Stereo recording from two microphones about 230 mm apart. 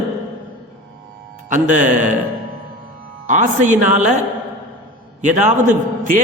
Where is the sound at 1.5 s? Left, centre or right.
Right.